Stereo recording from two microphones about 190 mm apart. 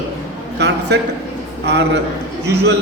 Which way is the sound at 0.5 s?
65° right (ahead or behind).